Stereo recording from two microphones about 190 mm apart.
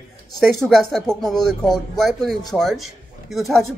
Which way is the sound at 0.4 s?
Centre (ahead or behind).